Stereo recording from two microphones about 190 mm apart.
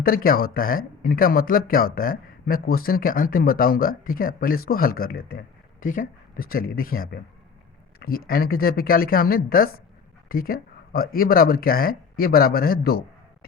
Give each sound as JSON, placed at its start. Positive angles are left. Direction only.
{"t": 0.0, "sound": "speech", "side_deg": 50}